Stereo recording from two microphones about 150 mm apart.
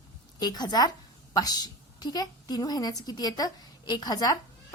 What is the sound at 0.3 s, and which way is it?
A woman's voice, 25° left (ahead or behind).